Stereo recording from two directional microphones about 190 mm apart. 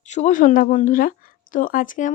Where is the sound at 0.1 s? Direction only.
40° left (ahead or behind).